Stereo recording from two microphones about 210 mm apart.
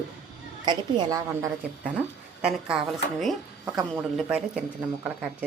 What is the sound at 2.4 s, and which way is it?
Speech, 5° right (ahead or behind).